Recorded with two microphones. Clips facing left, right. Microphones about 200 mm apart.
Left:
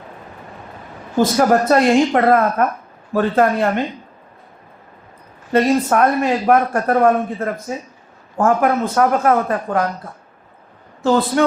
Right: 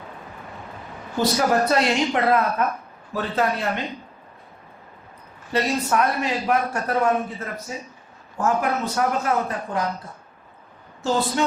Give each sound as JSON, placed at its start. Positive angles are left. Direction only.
{"t": 1.2, "sound": "a man's voice", "side_deg": 50}
{"t": 5.5, "sound": "a man's voice", "side_deg": 50}
{"t": 11.0, "sound": "speech", "side_deg": 60}